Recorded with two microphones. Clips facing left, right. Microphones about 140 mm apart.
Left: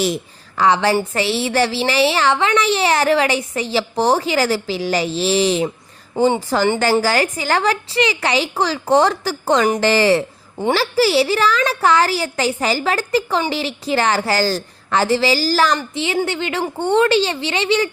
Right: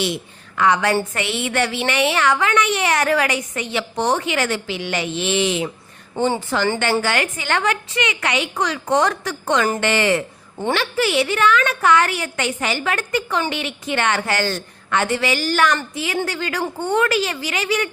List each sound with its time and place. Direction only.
0.0 s a woman's voice: 35° left (ahead or behind)